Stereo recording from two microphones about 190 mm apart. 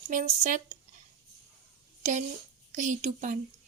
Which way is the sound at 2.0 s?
40° right (ahead or behind).